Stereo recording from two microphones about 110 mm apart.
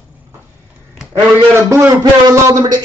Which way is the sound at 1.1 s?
25° right (ahead or behind).